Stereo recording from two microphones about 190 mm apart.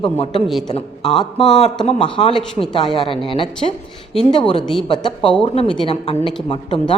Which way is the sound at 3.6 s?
35° left (ahead or behind).